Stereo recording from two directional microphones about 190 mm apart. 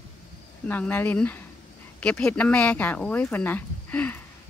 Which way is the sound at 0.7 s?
10° left (ahead or behind).